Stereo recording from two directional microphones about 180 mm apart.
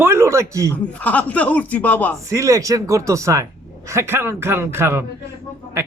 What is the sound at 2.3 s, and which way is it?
A man's voice, 15° right (ahead or behind).